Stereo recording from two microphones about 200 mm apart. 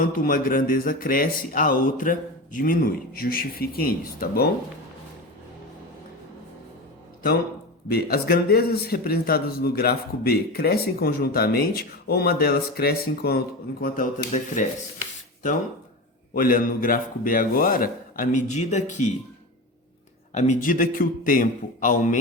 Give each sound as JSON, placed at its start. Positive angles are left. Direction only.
{"t": 0.0, "sound": "a man's voice", "side_deg": 45}
{"t": 7.9, "sound": "a man's voice", "side_deg": 50}
{"t": 16.3, "sound": "a man's voice", "side_deg": 45}
{"t": 20.3, "sound": "a man's voice", "side_deg": 40}